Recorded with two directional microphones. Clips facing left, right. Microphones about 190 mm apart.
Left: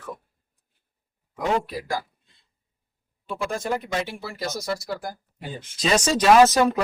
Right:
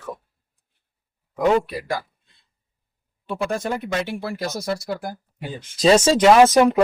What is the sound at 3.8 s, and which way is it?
Speech, 60° right (ahead or behind).